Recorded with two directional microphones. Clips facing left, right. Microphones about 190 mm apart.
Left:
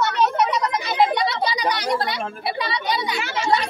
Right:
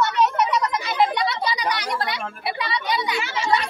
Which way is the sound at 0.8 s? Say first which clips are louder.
Left 2 dB; 35° left (ahead or behind).